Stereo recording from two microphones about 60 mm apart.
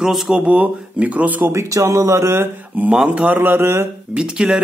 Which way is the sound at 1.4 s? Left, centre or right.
Right.